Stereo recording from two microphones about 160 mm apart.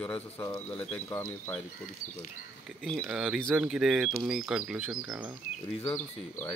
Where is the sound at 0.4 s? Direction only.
15° left (ahead or behind).